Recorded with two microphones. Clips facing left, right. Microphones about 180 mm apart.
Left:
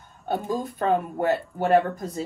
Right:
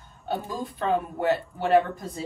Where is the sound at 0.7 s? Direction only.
45° left (ahead or behind).